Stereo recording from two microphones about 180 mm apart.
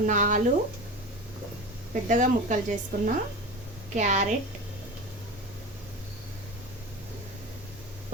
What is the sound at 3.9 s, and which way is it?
Speech, 40° right (ahead or behind).